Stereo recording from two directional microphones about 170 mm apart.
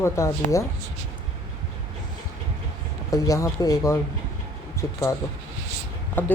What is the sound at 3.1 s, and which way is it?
Speech, 20° left (ahead or behind).